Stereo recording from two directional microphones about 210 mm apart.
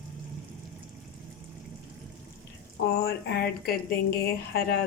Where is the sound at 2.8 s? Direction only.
50° left (ahead or behind).